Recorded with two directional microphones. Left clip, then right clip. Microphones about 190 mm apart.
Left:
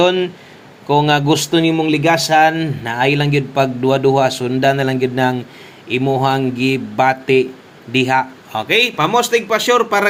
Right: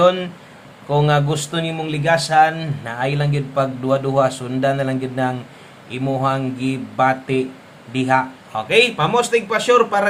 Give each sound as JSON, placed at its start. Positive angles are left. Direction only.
{"t": 0.0, "sound": "speech", "side_deg": 20}